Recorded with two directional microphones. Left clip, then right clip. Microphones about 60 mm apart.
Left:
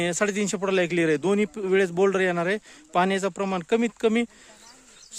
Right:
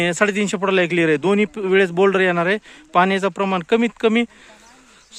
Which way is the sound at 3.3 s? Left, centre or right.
Centre.